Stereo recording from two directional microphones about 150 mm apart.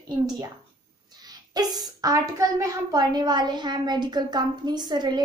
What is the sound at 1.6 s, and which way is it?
A child's voice, 25° right (ahead or behind).